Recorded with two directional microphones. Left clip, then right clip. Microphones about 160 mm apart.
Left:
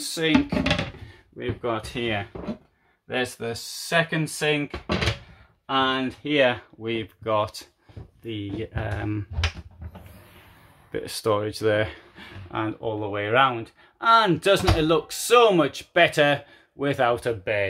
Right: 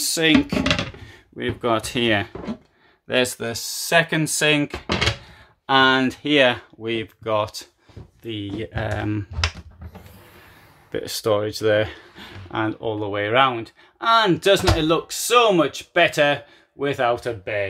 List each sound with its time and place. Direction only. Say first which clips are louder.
0.0 s a sound: right 6 dB; 40° right (ahead or behind)
1.4 s speech: right 6 dB; 50° right (ahead or behind)
3.1 s speech: right 6 dB; 50° right (ahead or behind)
5.7 s speech: right 7 dB; 55° right (ahead or behind)
6.2 s speech: right 2 dB; 15° right (ahead or behind)
8.7 s speech: right 7 dB; 30° right (ahead or behind)
10.9 s speech: right 3 dB; 15° right (ahead or behind)
12.2 s speech: right 4 dB; 35° right (ahead or behind); by 17.6 s 15° left (ahead or behind)